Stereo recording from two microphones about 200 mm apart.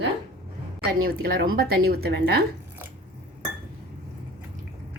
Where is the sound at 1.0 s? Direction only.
50° right (ahead or behind).